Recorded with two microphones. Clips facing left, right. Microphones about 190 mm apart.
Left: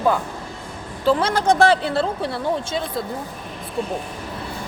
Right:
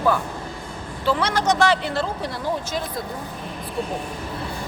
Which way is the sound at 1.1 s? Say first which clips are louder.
Left 3 dB; 30° left (ahead or behind).